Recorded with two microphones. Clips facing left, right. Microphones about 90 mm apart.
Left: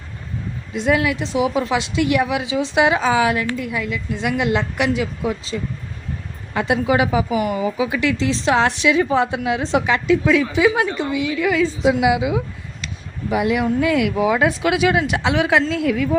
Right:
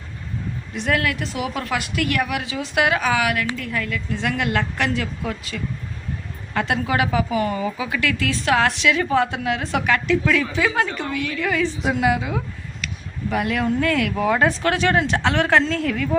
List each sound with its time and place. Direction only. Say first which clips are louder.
0.7 s a woman's voice: left 4 dB; 15° left (ahead or behind)
3.6 s a woman's voice: left 2 dB; 15° left (ahead or behind)